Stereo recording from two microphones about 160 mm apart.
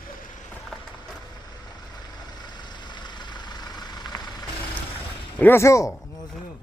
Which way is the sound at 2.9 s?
30° left (ahead or behind).